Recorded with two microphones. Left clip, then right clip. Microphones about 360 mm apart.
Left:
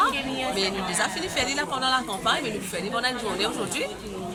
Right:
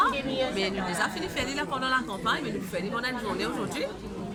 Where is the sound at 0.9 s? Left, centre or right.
Centre.